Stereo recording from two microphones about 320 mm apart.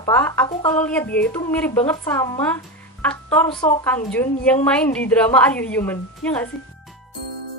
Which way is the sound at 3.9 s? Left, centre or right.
Centre.